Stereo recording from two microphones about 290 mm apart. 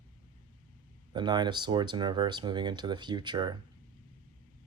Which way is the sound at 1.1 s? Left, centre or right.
Centre.